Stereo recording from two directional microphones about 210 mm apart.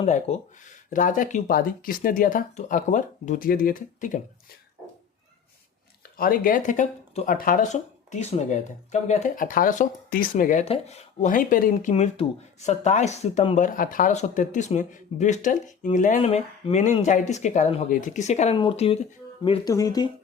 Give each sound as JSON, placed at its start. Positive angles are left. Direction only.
{"t": 0.0, "sound": "speech", "side_deg": 30}
{"t": 6.1, "sound": "speech", "side_deg": 45}
{"t": 13.7, "sound": "speech", "side_deg": 40}